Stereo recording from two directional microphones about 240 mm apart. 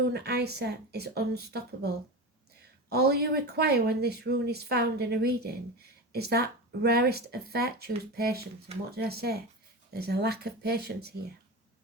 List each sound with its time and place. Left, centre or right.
0.1 s speech: right
2.9 s speech: right